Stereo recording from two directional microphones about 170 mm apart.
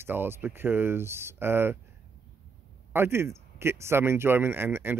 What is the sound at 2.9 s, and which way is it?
A man's voice, 15° right (ahead or behind).